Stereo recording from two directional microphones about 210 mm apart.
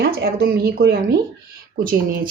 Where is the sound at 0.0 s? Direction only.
50° right (ahead or behind).